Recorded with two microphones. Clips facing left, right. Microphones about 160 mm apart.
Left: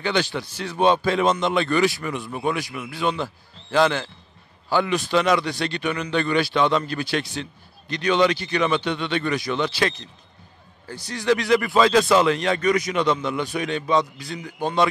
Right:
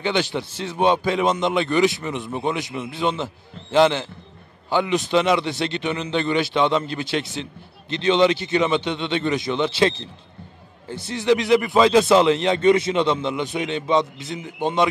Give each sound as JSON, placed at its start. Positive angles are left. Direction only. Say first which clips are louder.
{"t": 0.0, "sound": "speech", "louder": "right 1 dB", "side_deg": -20}